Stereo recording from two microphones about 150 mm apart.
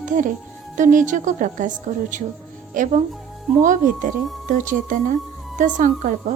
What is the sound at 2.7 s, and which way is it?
A woman's voice, 60° right (ahead or behind).